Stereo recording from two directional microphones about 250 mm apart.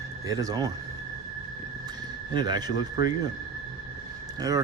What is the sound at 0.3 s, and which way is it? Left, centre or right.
Speech, centre.